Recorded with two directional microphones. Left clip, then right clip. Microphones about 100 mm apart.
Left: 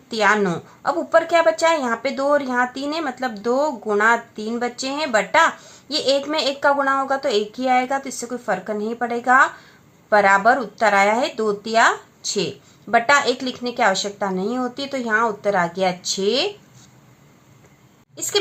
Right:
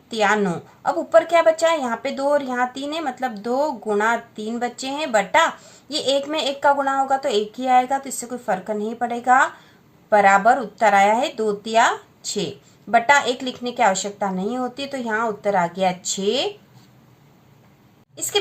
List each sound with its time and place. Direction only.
0.1 s a woman's voice: 40° left (ahead or behind)